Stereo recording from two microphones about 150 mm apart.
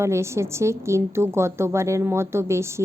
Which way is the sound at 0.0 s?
20° right (ahead or behind).